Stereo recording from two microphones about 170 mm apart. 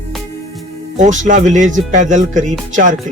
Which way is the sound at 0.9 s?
45° right (ahead or behind).